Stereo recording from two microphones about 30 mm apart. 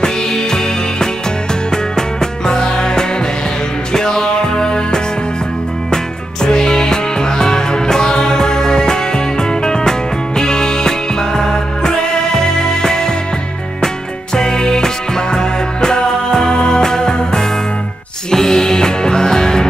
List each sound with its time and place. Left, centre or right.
0.0 s music: left
6.4 s music: left
14.3 s music: left